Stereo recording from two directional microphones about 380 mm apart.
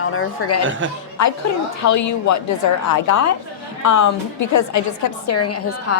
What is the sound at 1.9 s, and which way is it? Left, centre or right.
Speech, left.